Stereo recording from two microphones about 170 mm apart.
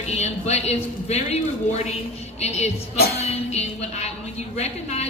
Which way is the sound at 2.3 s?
40° left (ahead or behind).